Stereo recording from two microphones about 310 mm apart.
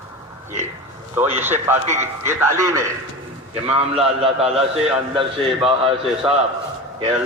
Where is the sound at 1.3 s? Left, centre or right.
Centre.